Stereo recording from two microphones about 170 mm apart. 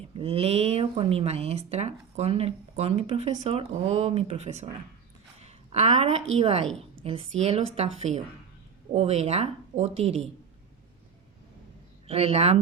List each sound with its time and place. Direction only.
0.2 s a woman's voice: 35° right (ahead or behind)
12.0 s speech: 35° right (ahead or behind)